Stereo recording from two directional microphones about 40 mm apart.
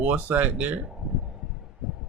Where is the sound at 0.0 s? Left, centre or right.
Right.